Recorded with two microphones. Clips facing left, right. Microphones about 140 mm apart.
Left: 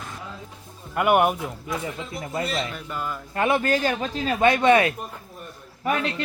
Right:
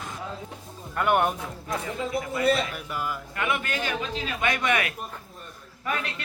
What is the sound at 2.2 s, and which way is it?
Speech, 30° left (ahead or behind).